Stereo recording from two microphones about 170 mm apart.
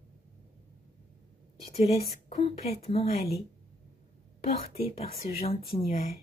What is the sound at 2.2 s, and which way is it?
Speech, 40° left (ahead or behind).